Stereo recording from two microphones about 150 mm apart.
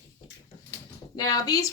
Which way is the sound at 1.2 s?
25° left (ahead or behind).